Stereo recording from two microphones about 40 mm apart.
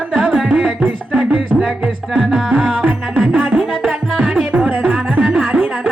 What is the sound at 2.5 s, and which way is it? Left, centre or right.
Music, right.